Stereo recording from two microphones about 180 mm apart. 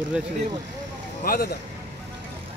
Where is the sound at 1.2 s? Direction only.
55° left (ahead or behind).